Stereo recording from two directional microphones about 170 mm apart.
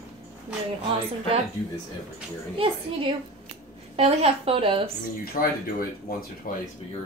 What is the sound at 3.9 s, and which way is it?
Speech, 35° right (ahead or behind).